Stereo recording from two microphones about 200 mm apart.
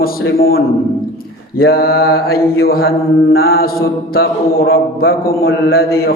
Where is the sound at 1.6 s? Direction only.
50° left (ahead or behind).